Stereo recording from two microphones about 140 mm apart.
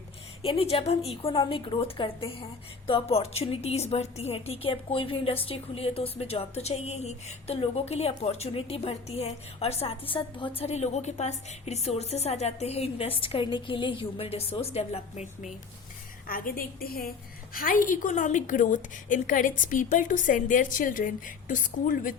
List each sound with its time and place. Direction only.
0.4 s a woman's voice: 45° left (ahead or behind)
16.2 s a woman's voice: 90° left; by 22.1 s 70° left (ahead or behind)